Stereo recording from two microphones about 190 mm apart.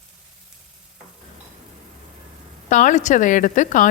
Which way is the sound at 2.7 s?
40° left (ahead or behind).